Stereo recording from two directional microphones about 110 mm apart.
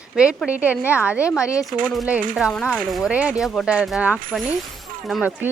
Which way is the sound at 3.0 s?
10° right (ahead or behind).